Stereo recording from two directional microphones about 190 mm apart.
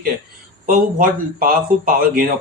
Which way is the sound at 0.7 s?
50° right (ahead or behind).